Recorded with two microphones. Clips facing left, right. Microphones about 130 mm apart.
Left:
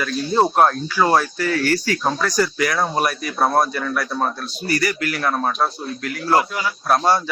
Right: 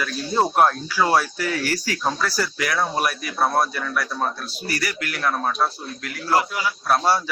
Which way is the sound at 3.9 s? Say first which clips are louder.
Left 3 dB; 10° left (ahead or behind).